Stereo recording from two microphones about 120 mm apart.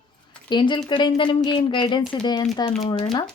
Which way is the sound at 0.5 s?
40° left (ahead or behind).